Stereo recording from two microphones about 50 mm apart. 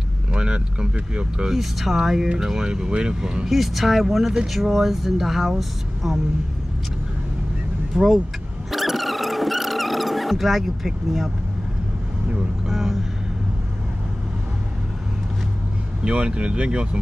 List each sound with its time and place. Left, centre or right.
0.3 s speech: centre
1.5 s speech: centre
3.4 s speech: centre
7.9 s speech: centre
8.7 s vehicle: centre
12.6 s vehicle: centre
16.0 s speech: right